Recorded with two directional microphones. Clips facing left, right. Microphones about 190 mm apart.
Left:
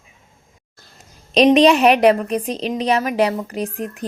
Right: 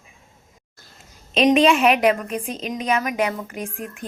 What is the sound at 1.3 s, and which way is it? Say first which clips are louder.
A woman's voice: left 4 dB; 35° left (ahead or behind).